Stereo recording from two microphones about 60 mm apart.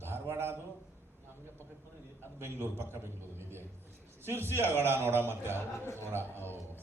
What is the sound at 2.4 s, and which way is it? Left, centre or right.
A man's voice, right.